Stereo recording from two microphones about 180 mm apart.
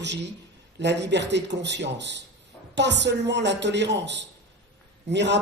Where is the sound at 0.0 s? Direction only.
75° right (ahead or behind).